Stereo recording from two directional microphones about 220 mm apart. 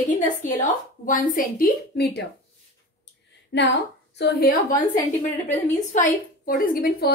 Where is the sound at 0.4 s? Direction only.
35° left (ahead or behind).